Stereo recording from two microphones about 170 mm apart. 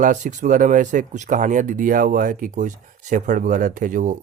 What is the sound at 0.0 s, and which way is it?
Speech, 45° right (ahead or behind).